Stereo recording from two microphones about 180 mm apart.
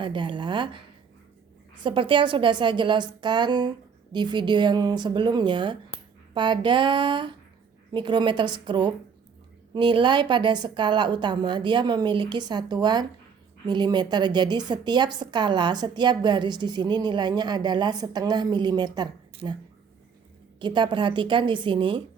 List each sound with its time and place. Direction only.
0.0 s a woman's voice: 25° right (ahead or behind)
1.8 s a woman's voice: 30° right (ahead or behind)
20.6 s a woman's voice: 25° right (ahead or behind)